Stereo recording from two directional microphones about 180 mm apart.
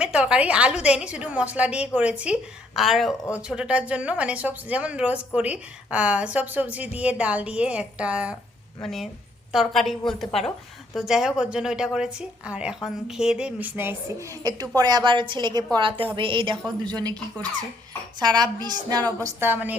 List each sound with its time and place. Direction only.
0.0 s a woman's voice: 5° right (ahead or behind); by 19.0 s 20° right (ahead or behind)
19.2 s speech: 10° right (ahead or behind)